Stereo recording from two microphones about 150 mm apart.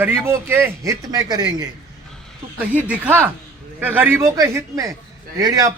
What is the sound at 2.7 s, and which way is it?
A man's voice, 10° right (ahead or behind).